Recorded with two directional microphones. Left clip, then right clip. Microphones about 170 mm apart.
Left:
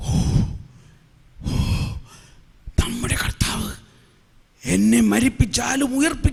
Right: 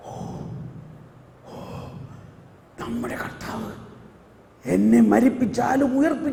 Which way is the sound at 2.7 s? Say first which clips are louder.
Left 4 dB; 40° left (ahead or behind).